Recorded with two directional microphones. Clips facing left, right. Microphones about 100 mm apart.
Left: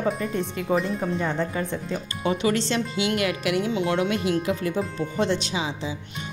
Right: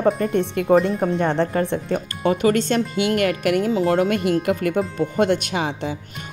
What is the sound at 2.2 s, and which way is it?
A woman's voice, 45° right (ahead or behind).